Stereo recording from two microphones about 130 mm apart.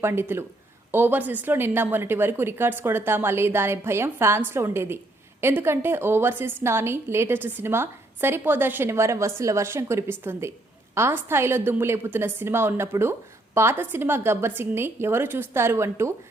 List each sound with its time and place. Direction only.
0.0 s a woman's voice: 20° right (ahead or behind)